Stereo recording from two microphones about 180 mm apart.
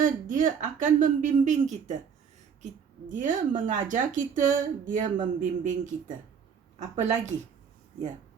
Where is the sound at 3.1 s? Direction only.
45° right (ahead or behind).